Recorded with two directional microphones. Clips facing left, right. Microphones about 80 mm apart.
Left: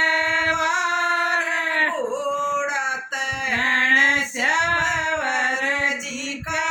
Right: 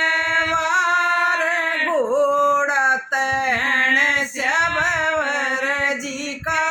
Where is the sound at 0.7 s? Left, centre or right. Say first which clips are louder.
Right 4 dB; right.